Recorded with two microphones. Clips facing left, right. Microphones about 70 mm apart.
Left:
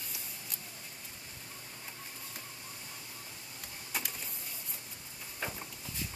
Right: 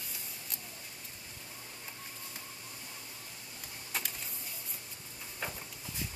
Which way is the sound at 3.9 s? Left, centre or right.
Centre.